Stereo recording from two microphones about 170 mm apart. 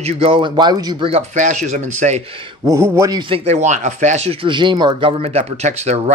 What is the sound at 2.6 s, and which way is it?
Speech, 20° right (ahead or behind).